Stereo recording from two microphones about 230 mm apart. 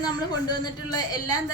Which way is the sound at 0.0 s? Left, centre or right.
Centre.